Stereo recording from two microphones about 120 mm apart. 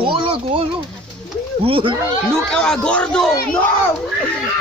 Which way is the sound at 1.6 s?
50° right (ahead or behind).